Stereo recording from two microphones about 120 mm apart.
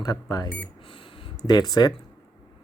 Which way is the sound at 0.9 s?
45° left (ahead or behind).